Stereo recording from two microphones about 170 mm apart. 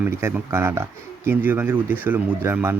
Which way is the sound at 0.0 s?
15° right (ahead or behind).